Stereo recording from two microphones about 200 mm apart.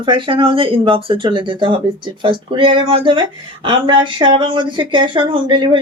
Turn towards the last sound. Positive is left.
turn(degrees=-25)  # may be behind; listen again after turning